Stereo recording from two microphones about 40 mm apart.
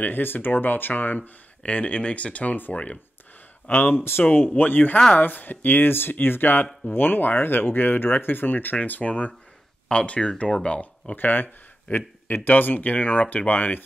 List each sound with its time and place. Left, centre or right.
0.0 s speech: left
1.6 s speech: left
2.5 s speech: left
3.6 s speech: left
3.9 s speech: left
4.2 s speech: left
9.8 s speech: left
11.1 s speech: left